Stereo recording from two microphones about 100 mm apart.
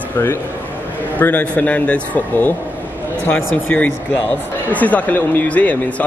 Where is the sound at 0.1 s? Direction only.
20° left (ahead or behind).